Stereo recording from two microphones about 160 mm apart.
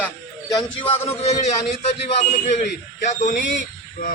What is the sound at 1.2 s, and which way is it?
A man's voice, 45° left (ahead or behind).